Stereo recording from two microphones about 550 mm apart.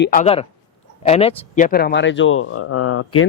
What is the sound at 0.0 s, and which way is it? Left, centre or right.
Speech, centre.